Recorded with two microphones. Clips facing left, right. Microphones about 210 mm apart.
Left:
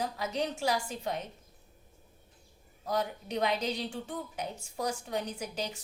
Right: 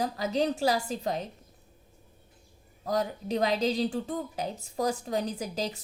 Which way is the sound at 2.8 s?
40° right (ahead or behind).